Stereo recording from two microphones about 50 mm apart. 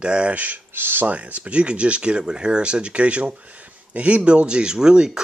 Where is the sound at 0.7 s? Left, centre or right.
Right.